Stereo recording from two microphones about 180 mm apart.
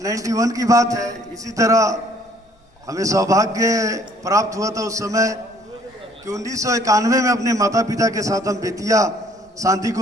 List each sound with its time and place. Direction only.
0.0 s a man's voice: 20° right (ahead or behind)